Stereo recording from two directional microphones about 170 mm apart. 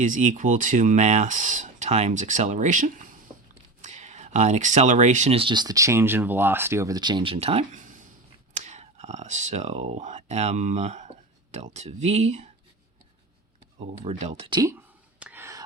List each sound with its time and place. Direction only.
0.0 s speech: 50° right (ahead or behind)
13.7 s speech: 40° right (ahead or behind)
14.7 s a sound: 10° right (ahead or behind)